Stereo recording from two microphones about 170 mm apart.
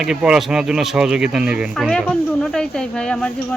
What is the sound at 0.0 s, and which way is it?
Speech, 5° right (ahead or behind).